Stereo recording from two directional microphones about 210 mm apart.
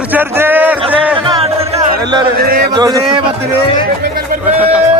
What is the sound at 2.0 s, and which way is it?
Music, 20° right (ahead or behind).